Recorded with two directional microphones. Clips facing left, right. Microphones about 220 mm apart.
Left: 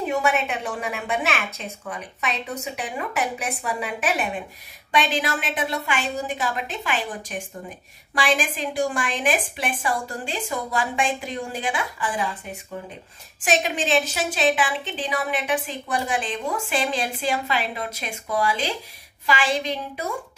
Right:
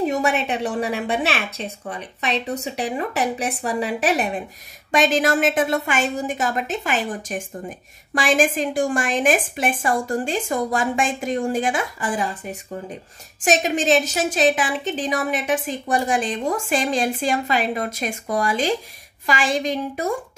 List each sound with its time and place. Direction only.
0.0 s a woman's voice: 35° right (ahead or behind)